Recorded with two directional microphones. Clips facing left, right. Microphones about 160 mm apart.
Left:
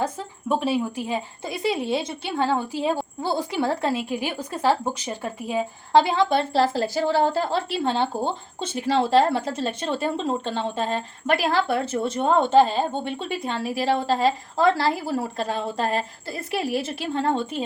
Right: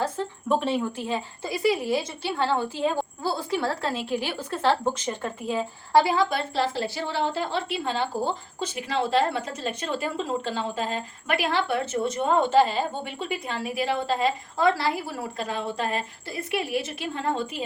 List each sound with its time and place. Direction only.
0.4 s speech: 5° left (ahead or behind)
3.6 s speech: 15° left (ahead or behind)
6.5 s a woman's voice: 40° left (ahead or behind)